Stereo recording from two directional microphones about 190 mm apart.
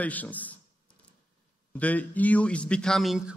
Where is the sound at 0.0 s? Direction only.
10° left (ahead or behind).